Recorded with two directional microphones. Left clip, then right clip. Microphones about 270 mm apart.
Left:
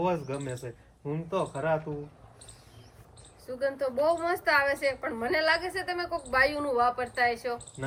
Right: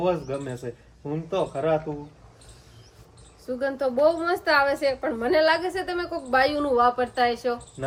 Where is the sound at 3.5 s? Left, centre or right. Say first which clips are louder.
Right 5 dB; centre.